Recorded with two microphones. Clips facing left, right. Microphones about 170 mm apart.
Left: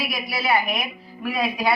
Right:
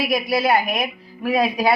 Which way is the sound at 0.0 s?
40° right (ahead or behind).